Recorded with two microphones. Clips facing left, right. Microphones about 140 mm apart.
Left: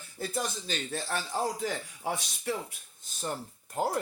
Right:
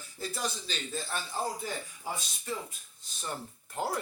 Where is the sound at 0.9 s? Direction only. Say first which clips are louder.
Left 2 dB; 85° left.